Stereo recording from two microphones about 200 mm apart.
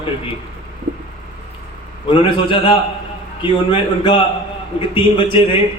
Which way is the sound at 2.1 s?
25° left (ahead or behind).